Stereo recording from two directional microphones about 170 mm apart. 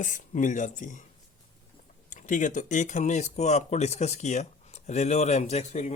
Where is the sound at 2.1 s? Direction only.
45° left (ahead or behind).